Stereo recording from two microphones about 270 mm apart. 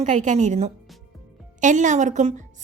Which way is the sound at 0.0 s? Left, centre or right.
Right.